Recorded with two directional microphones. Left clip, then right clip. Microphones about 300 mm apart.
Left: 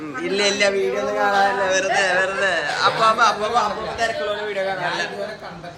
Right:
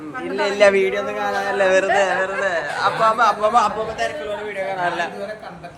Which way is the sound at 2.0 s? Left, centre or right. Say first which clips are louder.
Even; centre.